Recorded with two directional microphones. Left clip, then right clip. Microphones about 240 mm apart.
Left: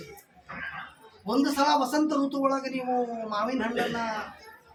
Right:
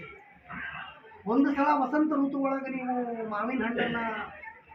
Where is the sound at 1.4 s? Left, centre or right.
Left.